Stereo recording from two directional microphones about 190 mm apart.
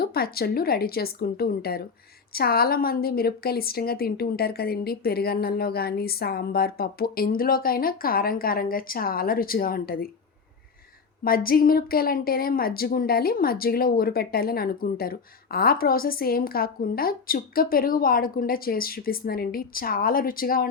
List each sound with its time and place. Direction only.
0.0 s a woman's voice: 55° left (ahead or behind)
11.2 s a woman's voice: 50° left (ahead or behind)